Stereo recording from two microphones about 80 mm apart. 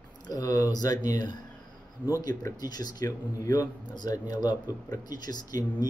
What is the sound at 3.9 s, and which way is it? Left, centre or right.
Speech, left.